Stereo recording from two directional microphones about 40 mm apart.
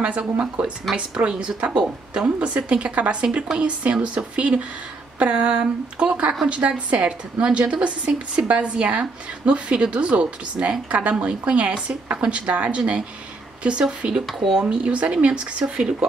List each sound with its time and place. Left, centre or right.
0.0 s a woman's voice: right
15.7 s speech: right